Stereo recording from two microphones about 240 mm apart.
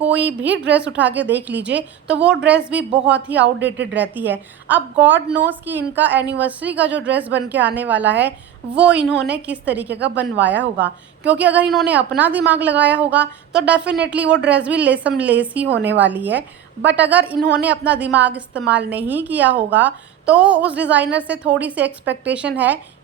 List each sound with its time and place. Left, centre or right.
0.0 s a woman's voice: centre